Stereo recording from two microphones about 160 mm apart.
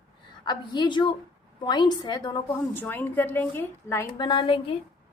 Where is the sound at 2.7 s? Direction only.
10° left (ahead or behind).